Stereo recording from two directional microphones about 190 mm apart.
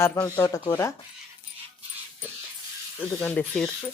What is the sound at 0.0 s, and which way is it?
Speech, 15° left (ahead or behind).